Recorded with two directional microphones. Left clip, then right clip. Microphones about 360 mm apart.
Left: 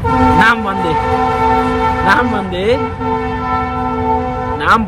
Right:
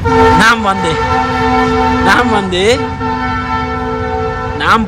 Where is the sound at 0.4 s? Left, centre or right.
Centre.